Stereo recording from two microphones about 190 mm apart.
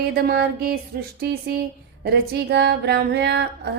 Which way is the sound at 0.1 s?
55° right (ahead or behind).